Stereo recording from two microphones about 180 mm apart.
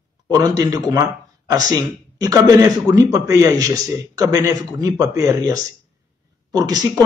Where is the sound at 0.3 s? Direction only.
20° right (ahead or behind).